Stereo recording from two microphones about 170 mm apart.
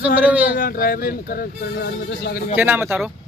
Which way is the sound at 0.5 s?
60° left (ahead or behind).